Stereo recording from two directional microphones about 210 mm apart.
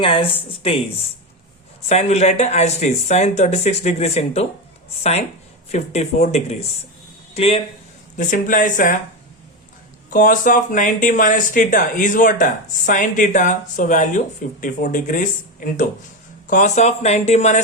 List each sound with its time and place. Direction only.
0.0 s speech: 25° left (ahead or behind)
1.9 s speech: 30° left (ahead or behind)
5.7 s speech: 30° left (ahead or behind)
8.1 s speech: 40° left (ahead or behind)
10.1 s speech: 40° left (ahead or behind)